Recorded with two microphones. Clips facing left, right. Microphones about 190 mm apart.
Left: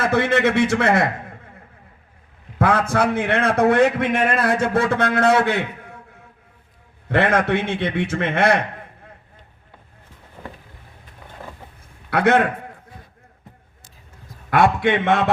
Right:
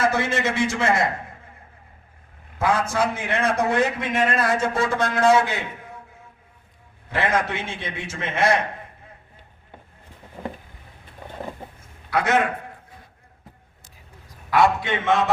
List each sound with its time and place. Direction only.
0.0 s a man's voice: 60° left (ahead or behind)
2.6 s a man's voice: 60° left (ahead or behind)
7.1 s a man's voice: 60° left (ahead or behind)
12.1 s a man's voice: 60° left (ahead or behind)
14.5 s a man's voice: 55° left (ahead or behind)